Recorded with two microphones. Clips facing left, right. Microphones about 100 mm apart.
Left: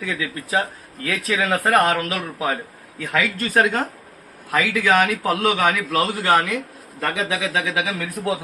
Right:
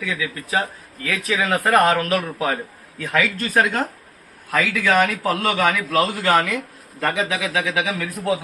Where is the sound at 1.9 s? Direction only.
10° left (ahead or behind).